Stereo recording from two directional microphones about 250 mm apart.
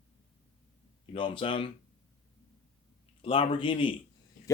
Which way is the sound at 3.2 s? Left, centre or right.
Left.